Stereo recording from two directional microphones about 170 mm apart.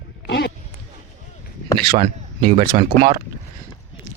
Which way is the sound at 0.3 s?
80° left.